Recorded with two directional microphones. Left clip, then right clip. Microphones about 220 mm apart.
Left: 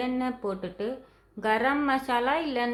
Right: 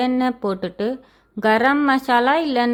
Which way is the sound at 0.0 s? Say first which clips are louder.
Right 9 dB; 40° right (ahead or behind).